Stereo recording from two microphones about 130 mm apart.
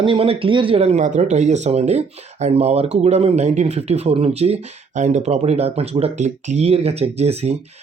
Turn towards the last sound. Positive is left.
turn(degrees=-55)  # may be behind; listen again after turning